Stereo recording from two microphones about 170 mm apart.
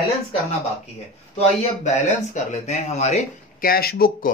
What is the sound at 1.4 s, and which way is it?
Speech, 40° left (ahead or behind).